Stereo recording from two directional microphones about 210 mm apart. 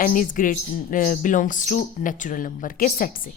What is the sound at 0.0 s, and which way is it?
A woman's voice, 40° left (ahead or behind).